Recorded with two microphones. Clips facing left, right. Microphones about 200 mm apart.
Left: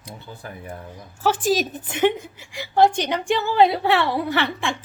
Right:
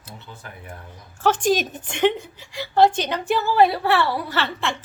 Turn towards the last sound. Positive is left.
turn(degrees=15)  # may be behind; listen again after turning